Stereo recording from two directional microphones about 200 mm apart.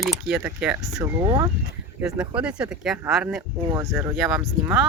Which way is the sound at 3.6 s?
20° right (ahead or behind).